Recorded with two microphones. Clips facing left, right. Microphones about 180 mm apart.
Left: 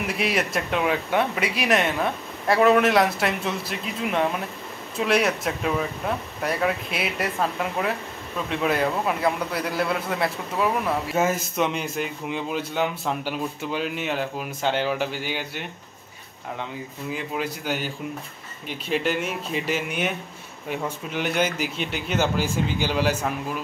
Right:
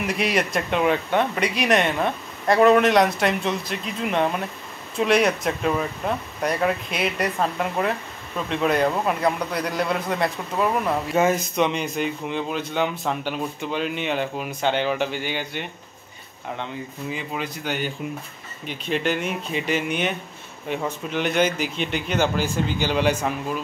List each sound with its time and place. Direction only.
0.0 s a man's voice: centre (ahead or behind)
17.1 s a man's voice: 5° left (ahead or behind)